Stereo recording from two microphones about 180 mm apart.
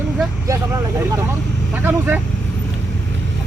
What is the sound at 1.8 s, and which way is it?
Speech, 10° right (ahead or behind).